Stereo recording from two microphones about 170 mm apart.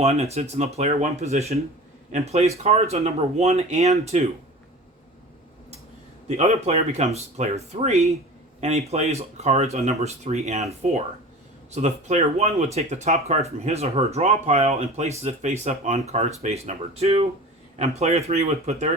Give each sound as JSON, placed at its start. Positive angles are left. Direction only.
{"t": 0.0, "sound": "speech", "side_deg": -40}
{"t": 6.2, "sound": "speech", "side_deg": -40}